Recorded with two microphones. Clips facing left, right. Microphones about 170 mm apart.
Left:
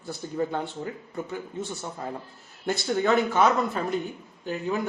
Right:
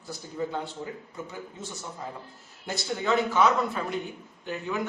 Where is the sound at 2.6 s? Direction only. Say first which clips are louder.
Left 6 dB; 55° left (ahead or behind).